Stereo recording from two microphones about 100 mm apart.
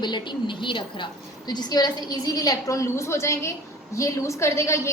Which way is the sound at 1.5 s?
45° left (ahead or behind).